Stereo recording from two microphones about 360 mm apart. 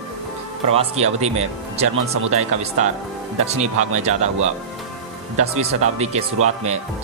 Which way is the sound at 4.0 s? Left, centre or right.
Centre.